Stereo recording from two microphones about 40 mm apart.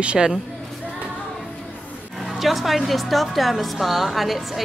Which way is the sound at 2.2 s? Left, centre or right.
Centre.